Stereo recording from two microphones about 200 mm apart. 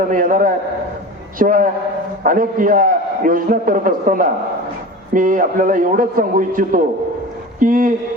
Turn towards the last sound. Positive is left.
turn(degrees=-45)  # may be behind; listen again after turning